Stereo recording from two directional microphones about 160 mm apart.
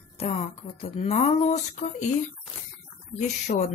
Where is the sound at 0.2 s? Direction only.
40° left (ahead or behind).